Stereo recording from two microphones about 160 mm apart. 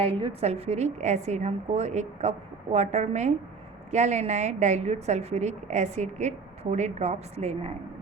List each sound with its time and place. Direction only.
0.0 s a woman's voice: 35° right (ahead or behind)